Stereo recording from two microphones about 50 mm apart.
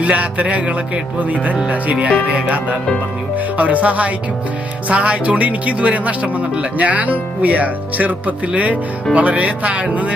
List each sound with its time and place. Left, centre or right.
0.0 s speech: right
1.6 s speech: right